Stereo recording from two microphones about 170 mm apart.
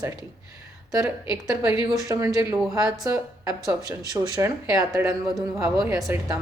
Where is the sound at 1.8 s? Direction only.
20° right (ahead or behind).